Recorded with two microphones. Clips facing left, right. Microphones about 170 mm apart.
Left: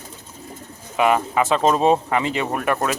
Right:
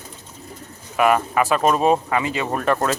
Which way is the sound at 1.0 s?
20° left (ahead or behind).